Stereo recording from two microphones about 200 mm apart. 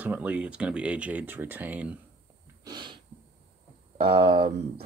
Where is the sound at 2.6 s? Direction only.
20° right (ahead or behind).